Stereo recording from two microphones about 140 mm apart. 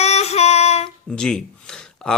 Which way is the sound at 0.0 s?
50° left (ahead or behind).